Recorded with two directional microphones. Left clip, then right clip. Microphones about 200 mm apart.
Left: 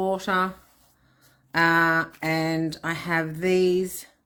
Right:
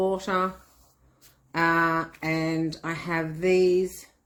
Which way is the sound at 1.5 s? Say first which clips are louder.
Left 3 dB; 35° left (ahead or behind).